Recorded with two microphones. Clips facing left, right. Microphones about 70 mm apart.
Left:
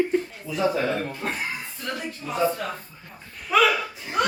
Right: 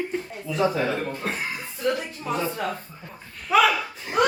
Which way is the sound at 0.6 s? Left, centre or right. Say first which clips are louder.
Even; centre.